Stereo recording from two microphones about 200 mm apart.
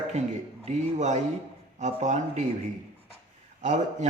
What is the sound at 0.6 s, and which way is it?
A man's voice, 35° right (ahead or behind).